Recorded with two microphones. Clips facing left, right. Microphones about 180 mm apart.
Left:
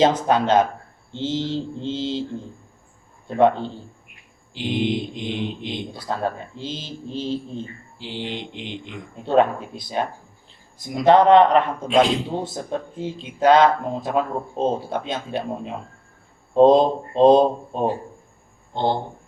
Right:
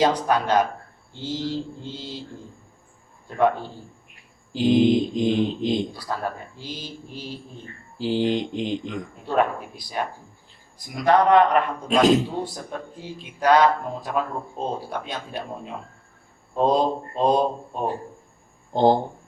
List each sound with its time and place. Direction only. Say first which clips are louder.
0.0 s speech: left 3 dB; 25° left (ahead or behind)
3.2 s speech: left 4 dB; 25° left (ahead or behind)
4.1 s mantra: right 9 dB; 40° right (ahead or behind)
5.9 s speech: left 3 dB; 25° left (ahead or behind)
7.9 s speech: right 9 dB; 40° right (ahead or behind)
9.2 s speech: left 5 dB; 25° left (ahead or behind)
18.7 s speech: right 5 dB; 40° right (ahead or behind)